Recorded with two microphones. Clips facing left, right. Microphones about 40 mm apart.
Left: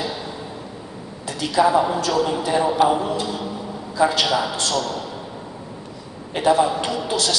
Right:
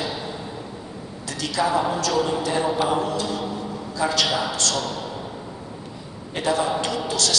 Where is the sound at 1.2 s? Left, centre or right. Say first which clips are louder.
Left 5 dB; centre.